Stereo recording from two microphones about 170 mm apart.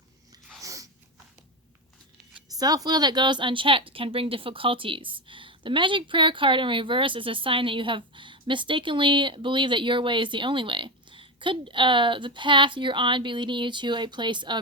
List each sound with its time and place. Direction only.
0.6 s biting: 20° right (ahead or behind)
2.6 s speech: 20° right (ahead or behind)